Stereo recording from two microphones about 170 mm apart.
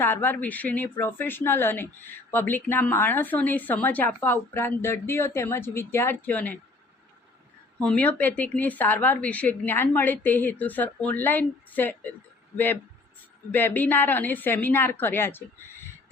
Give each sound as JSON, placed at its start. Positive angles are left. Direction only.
{"t": 0.0, "sound": "a woman's voice", "side_deg": 10}
{"t": 7.8, "sound": "a woman's voice", "side_deg": 10}